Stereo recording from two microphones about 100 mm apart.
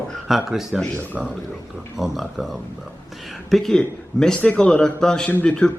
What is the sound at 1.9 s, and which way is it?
Speech, centre (ahead or behind).